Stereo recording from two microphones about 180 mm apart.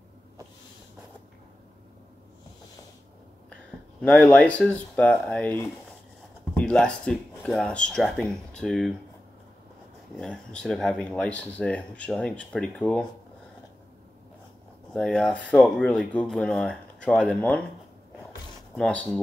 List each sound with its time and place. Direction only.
4.0 s speech: 5° left (ahead or behind)
10.1 s speech: 5° left (ahead or behind)
15.0 s speech: 5° left (ahead or behind)